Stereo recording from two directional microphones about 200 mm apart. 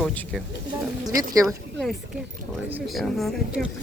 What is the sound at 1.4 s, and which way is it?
Speech, centre (ahead or behind).